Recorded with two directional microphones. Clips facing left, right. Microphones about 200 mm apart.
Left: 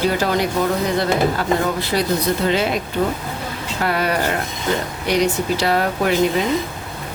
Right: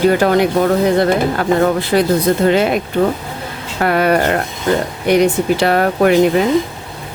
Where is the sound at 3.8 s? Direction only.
55° right (ahead or behind).